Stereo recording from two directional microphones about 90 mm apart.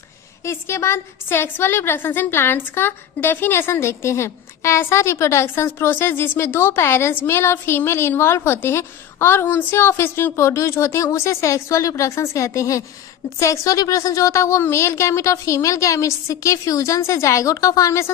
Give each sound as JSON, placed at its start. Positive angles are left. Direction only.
{"t": 0.4, "sound": "a woman's voice", "side_deg": 30}